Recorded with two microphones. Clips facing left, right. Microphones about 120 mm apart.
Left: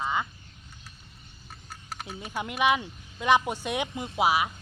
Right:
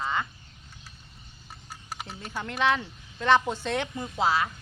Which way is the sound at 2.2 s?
15° left (ahead or behind).